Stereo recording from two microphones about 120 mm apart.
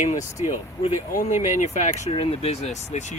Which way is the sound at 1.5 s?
85° left.